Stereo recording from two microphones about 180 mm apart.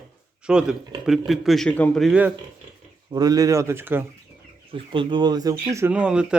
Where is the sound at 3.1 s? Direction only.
20° right (ahead or behind).